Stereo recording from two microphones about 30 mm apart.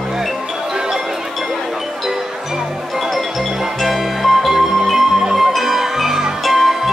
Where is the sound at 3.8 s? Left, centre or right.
Centre.